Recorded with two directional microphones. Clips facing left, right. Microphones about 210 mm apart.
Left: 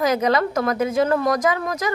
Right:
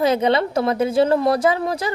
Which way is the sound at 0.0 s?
30° right (ahead or behind).